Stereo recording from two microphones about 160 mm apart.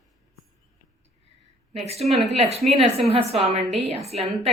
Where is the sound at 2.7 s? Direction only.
40° right (ahead or behind).